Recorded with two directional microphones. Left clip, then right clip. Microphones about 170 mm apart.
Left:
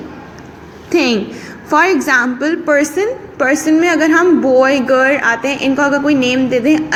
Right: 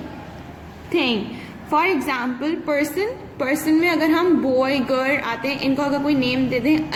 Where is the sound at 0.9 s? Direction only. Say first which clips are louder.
Left 7 dB; 25° left (ahead or behind).